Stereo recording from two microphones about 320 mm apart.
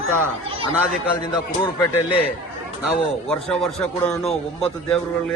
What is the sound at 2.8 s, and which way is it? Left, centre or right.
Speech, centre.